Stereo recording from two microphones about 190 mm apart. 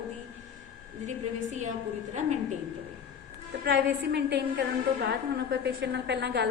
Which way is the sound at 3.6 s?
60° right (ahead or behind).